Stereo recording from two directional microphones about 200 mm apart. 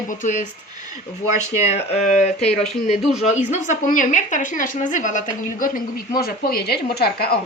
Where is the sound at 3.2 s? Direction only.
35° left (ahead or behind); by 7.4 s 50° left (ahead or behind).